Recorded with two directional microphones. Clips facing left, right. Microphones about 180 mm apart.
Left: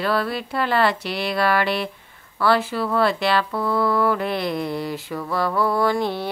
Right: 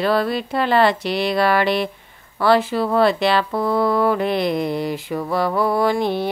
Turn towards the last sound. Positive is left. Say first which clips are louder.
# right 3 dB
turn(degrees=-15)  # may be behind; listen again after turning